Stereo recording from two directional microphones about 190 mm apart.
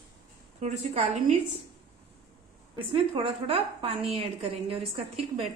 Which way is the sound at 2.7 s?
30° right (ahead or behind).